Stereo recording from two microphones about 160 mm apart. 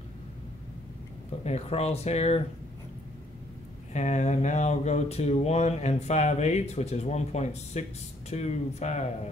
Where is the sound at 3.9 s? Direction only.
45° left (ahead or behind).